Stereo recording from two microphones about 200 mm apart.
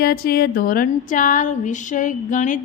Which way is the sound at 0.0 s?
50° left (ahead or behind).